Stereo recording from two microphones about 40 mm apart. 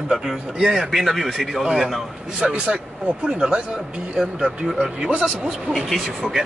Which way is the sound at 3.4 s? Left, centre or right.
Centre.